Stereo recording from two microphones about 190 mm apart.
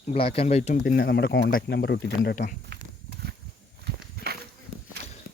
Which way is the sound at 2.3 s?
45° left (ahead or behind).